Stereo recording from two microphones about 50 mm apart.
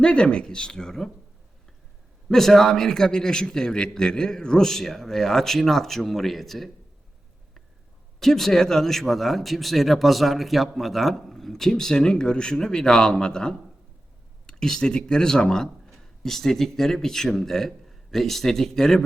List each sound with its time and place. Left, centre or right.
0.0 s a man's voice: centre
2.3 s a man's voice: centre
8.2 s speech: centre